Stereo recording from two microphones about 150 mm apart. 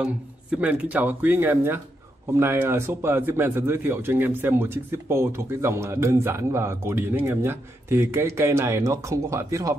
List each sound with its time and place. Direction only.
0.0 s speech: 10° right (ahead or behind)